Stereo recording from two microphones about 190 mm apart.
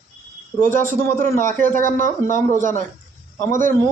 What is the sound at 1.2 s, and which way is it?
Speech, 45° right (ahead or behind).